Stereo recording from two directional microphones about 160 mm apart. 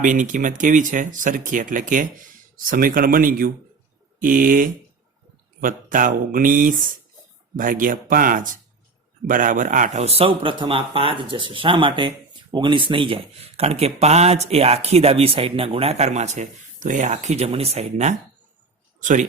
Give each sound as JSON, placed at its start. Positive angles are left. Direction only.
{"t": 0.0, "sound": "speech", "side_deg": -55}